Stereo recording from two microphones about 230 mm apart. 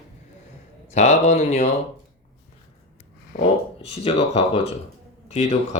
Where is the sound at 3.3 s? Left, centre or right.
Left.